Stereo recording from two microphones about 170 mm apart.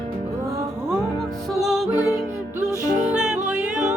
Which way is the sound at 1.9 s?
20° left (ahead or behind).